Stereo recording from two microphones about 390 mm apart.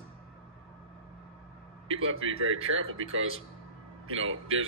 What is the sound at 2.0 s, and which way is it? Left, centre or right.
Speech, right.